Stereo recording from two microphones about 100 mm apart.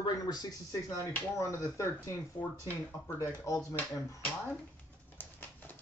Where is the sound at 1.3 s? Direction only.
30° left (ahead or behind).